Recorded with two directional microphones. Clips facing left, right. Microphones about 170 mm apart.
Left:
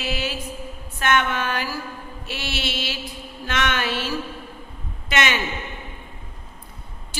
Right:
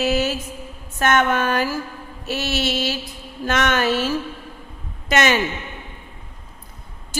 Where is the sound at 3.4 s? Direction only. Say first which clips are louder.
Right 5 dB; 45° right (ahead or behind).